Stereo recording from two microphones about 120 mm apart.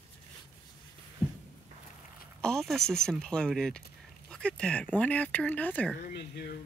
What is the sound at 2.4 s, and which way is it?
Speech, 5° left (ahead or behind).